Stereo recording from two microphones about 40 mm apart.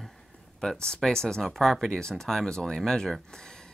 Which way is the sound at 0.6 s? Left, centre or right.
Centre.